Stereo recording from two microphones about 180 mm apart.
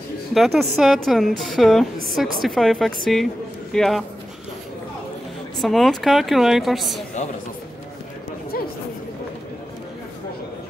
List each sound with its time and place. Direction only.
0.3 s a woman's voice: centre (ahead or behind)
5.6 s a woman's voice: centre (ahead or behind)
7.2 s speech: 40° left (ahead or behind)